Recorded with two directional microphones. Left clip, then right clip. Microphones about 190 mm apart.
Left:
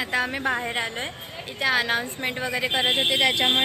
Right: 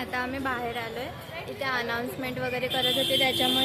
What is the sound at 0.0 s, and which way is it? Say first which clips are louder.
A woman's voice: left 6 dB; centre (ahead or behind).